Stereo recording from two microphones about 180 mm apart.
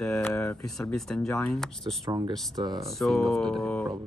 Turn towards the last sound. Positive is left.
turn(degrees=5)  # may be behind; listen again after turning